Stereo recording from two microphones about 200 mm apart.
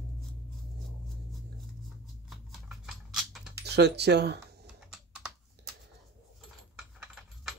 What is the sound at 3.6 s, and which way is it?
Speech, 55° right (ahead or behind).